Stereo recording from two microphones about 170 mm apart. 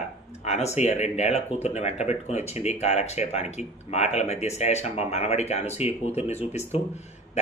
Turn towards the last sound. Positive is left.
turn(degrees=40)  # may be behind; listen again after turning